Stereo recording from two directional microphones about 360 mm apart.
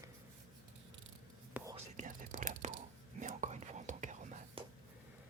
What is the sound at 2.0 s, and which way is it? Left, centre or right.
Whispering, right.